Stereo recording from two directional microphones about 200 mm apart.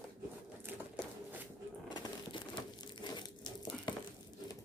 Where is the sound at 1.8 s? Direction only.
25° left (ahead or behind).